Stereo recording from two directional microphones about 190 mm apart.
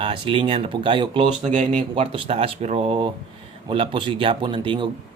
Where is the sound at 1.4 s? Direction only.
40° right (ahead or behind).